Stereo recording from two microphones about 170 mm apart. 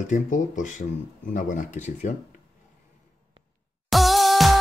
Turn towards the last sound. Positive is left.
turn(degrees=0)  # may be behind; listen again after turning